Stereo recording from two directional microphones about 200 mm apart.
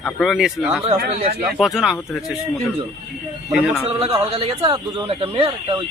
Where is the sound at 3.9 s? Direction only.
25° right (ahead or behind).